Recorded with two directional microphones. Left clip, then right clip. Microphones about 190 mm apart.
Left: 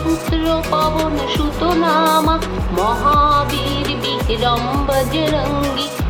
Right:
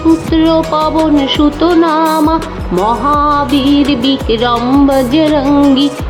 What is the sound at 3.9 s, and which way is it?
Music, 40° right (ahead or behind).